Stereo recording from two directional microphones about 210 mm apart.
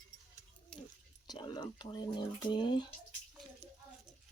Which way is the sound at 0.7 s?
5° left (ahead or behind).